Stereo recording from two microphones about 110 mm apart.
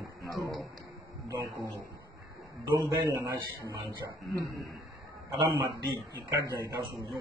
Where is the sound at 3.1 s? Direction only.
30° right (ahead or behind).